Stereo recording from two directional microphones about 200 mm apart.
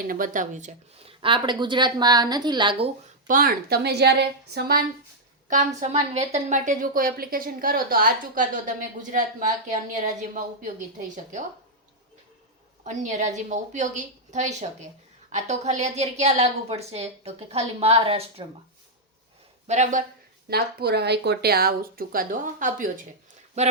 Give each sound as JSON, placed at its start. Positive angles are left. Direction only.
{"t": 0.0, "sound": "speech", "side_deg": -45}
{"t": 3.2, "sound": "a woman's voice", "side_deg": -45}
{"t": 5.5, "sound": "a woman's voice", "side_deg": -35}
{"t": 12.8, "sound": "a woman's voice", "side_deg": -35}
{"t": 19.6, "sound": "a woman's voice", "side_deg": -35}
{"t": 20.5, "sound": "a woman's voice", "side_deg": -55}